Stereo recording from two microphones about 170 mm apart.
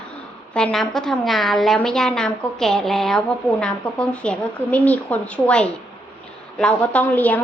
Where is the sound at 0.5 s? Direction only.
5° left (ahead or behind).